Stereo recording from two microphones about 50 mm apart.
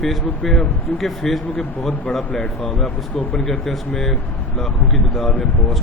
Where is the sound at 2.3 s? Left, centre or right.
Left.